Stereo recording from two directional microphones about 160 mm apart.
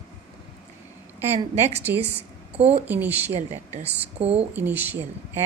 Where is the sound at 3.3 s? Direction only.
40° right (ahead or behind).